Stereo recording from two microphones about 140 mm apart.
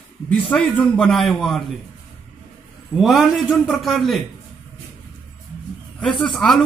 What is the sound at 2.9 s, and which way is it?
Speech, 5° right (ahead or behind).